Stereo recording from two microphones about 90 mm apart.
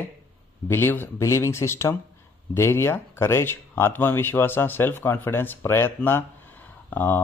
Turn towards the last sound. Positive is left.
turn(degrees=25)  # may be behind; listen again after turning